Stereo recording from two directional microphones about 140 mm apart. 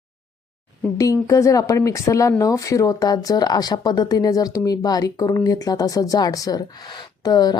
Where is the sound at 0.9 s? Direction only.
25° left (ahead or behind).